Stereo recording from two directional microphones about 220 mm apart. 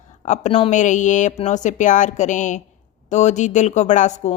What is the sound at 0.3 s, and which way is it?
Speech, 30° left (ahead or behind).